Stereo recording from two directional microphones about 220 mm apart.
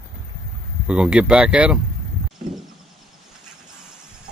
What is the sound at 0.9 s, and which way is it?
Speech, 5° right (ahead or behind).